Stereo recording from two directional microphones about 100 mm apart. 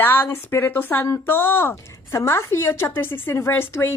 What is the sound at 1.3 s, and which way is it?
A woman's voice, 20° left (ahead or behind).